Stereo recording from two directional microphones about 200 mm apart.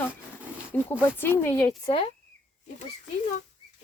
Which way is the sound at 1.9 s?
25° left (ahead or behind).